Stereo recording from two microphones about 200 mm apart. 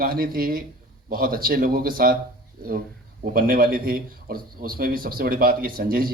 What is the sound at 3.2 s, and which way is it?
A man's voice, 45° right (ahead or behind).